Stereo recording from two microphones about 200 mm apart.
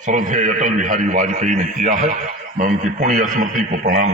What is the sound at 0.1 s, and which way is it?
A man's voice, 40° right (ahead or behind).